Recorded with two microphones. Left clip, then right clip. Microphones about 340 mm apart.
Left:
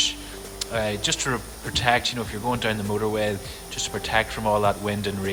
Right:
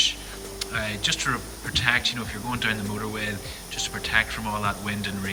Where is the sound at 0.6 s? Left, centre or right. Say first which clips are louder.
Left 2 dB; centre.